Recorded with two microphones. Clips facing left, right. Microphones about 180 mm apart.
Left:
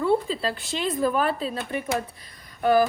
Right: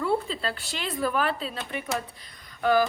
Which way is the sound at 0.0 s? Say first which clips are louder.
Left 4 dB; 20° left (ahead or behind).